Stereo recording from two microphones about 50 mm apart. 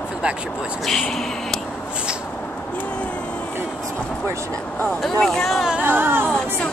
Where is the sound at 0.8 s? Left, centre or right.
Centre.